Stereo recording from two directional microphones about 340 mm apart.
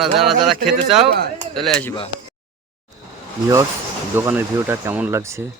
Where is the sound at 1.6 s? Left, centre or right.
Centre.